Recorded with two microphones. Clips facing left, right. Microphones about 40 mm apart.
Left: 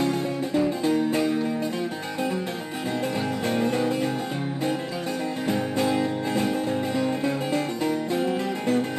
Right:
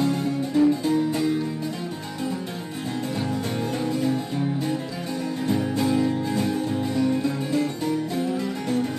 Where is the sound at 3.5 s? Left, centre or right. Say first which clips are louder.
Left 3 dB; left.